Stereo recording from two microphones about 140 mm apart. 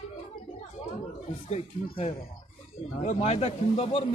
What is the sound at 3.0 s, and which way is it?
Speech, 50° left (ahead or behind).